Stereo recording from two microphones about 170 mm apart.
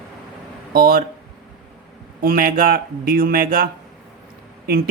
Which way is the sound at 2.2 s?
55° right (ahead or behind).